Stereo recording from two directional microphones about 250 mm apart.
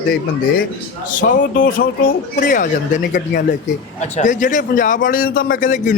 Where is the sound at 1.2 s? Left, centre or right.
Left.